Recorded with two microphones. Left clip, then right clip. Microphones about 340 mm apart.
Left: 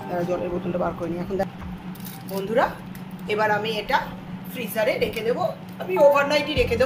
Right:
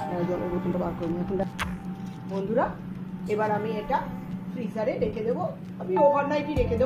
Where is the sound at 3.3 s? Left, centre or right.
Left.